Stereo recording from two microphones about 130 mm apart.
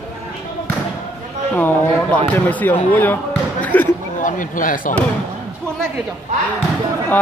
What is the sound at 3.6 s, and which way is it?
Basketball bounce, 10° left (ahead or behind).